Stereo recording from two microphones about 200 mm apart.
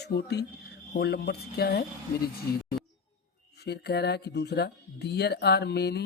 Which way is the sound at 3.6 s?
55° left (ahead or behind).